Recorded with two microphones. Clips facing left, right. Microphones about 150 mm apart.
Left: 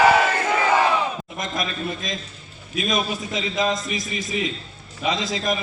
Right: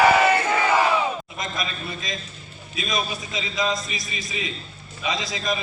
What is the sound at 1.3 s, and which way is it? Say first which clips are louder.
A man's voice: left 3 dB; 50° left (ahead or behind).